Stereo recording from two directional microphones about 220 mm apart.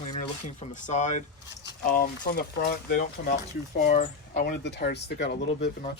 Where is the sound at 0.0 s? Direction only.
30° left (ahead or behind).